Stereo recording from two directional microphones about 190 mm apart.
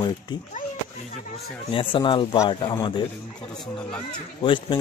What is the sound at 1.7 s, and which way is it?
Speech, 25° left (ahead or behind).